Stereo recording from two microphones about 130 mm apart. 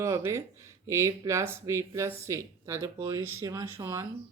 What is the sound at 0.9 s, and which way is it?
Speech, 25° right (ahead or behind).